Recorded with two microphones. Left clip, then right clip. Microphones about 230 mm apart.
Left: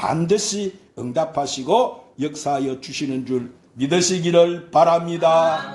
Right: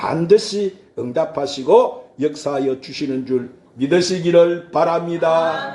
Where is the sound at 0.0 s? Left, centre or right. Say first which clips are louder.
Right 5 dB; left.